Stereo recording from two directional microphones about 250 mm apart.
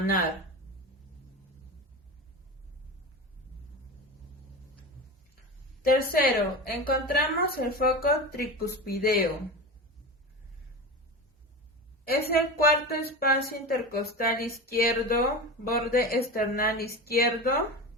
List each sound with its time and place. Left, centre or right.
0.0 s speech: left
5.8 s a woman's voice: left
12.0 s a woman's voice: left